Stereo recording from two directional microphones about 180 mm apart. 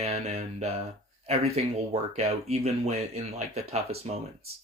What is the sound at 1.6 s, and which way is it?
Speech, 35° right (ahead or behind).